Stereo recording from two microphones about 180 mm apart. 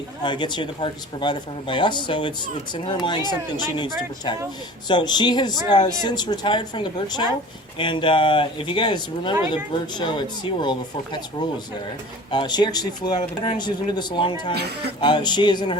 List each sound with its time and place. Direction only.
0.2 s speech: 25° left (ahead or behind)
12.3 s speech: 25° left (ahead or behind)
14.5 s speech: 65° right (ahead or behind)
15.0 s speech: 25° left (ahead or behind)